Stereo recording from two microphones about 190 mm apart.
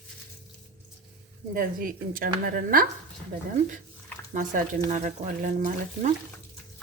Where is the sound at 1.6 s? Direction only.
50° right (ahead or behind).